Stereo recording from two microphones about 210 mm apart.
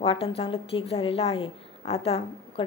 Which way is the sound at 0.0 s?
25° left (ahead or behind).